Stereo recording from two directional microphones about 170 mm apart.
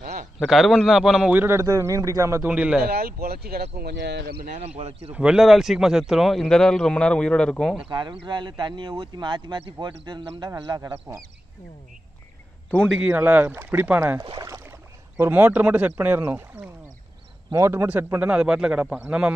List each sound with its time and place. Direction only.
0.0 s a sound: 55° right (ahead or behind)
0.4 s a man's voice: centre (ahead or behind)
2.8 s speech: 65° right (ahead or behind)
4.6 s speech: 40° right (ahead or behind)
5.1 s speech: 5° right (ahead or behind)
7.9 s speech: 30° right (ahead or behind)
12.7 s a man's voice: centre (ahead or behind)
14.2 s a man's voice: 25° right (ahead or behind); by 19.3 s 5° right (ahead or behind)